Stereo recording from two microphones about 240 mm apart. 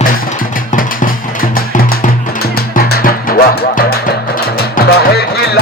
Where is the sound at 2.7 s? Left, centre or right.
Left.